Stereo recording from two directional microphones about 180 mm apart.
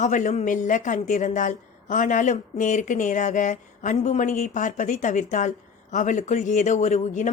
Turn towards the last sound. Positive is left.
turn(degrees=40)  # may be behind; listen again after turning